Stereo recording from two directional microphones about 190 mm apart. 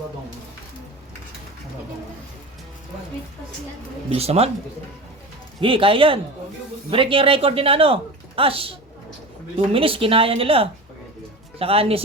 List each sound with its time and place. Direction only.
4.1 s speech: 35° right (ahead or behind)
5.5 s speech: 30° right (ahead or behind)